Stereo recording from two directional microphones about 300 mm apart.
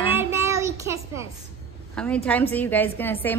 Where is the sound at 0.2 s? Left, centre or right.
Centre.